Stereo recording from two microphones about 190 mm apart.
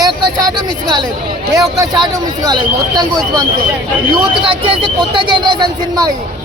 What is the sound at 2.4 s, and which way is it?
Speech, 20° right (ahead or behind).